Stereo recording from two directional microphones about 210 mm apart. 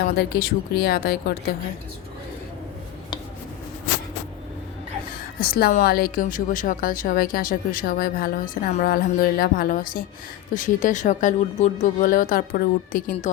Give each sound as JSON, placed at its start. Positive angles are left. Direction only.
{"t": 0.2, "sound": "a woman's voice", "side_deg": 50}
{"t": 5.4, "sound": "a woman's voice", "side_deg": 45}